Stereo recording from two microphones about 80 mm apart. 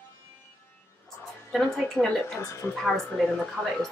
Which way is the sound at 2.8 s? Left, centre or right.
Centre.